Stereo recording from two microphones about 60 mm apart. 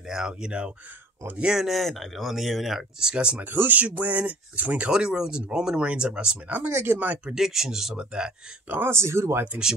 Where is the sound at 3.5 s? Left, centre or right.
Right.